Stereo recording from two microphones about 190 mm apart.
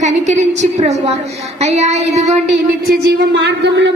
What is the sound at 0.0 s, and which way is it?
A woman's voice, 40° right (ahead or behind).